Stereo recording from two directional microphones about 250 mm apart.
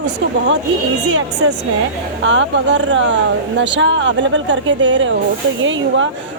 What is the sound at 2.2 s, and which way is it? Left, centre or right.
Speech, right.